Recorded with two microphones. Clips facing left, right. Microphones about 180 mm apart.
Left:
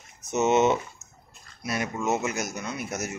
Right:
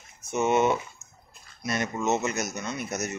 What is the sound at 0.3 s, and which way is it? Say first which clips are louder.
Speech: left 2 dB; 20° left (ahead or behind).